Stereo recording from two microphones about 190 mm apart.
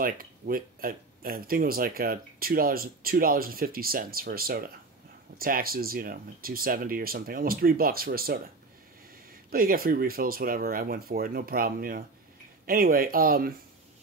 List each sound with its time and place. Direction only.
0.0 s speech: 50° right (ahead or behind)
9.5 s speech: 50° right (ahead or behind)